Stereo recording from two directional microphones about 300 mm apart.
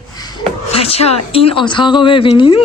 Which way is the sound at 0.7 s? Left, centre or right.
Centre.